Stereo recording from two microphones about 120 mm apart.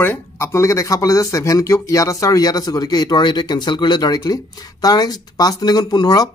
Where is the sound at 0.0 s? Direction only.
20° left (ahead or behind).